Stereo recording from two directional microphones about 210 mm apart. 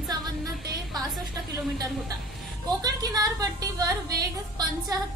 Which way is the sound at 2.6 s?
20° right (ahead or behind).